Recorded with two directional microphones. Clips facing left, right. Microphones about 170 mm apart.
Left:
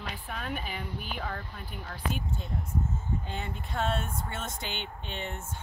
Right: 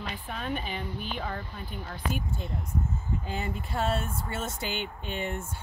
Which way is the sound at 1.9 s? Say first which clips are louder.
Right 1 dB; 10° right (ahead or behind).